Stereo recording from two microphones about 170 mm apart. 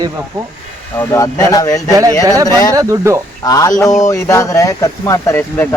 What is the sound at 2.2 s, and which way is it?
Speech, 20° right (ahead or behind).